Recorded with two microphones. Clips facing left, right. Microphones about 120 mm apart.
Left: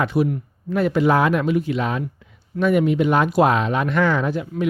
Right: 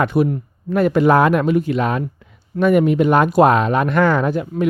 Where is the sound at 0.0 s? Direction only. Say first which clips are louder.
Right 3 dB; 50° right (ahead or behind).